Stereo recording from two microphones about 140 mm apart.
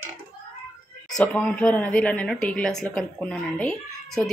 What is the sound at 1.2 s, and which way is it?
A woman's voice, 10° left (ahead or behind).